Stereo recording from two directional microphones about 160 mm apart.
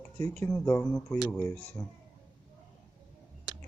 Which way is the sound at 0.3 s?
15° left (ahead or behind).